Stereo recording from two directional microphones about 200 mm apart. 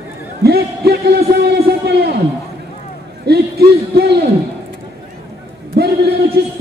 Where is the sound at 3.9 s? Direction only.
55° right (ahead or behind).